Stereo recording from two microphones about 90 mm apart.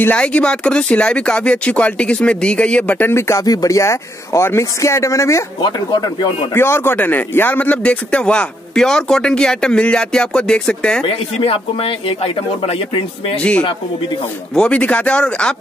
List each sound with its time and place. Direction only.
0.0 s speech: 15° left (ahead or behind)
3.2 s speech: 30° left (ahead or behind)
5.6 s speech: 55° left (ahead or behind)
6.5 s speech: 25° left (ahead or behind); by 11.1 s 10° left (ahead or behind)
11.1 s speech: 90° left
14.5 s speech: 10° left (ahead or behind)